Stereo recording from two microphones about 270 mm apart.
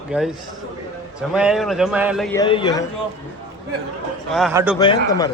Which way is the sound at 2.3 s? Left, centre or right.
Centre.